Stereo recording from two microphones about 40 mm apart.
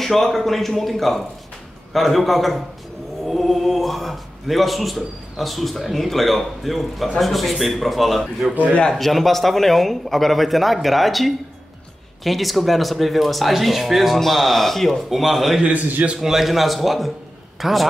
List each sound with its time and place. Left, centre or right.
0.0 s speech: centre
15.7 s a man's voice: right
16.2 s a man's voice: centre